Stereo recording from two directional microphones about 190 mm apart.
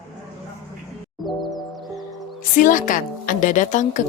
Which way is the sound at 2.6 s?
45° left (ahead or behind).